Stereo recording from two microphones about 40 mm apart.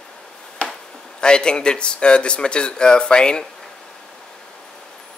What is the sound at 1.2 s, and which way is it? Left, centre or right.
Speech, left.